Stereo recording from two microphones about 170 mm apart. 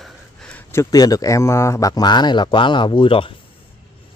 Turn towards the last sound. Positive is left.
turn(degrees=30)  # may be behind; listen again after turning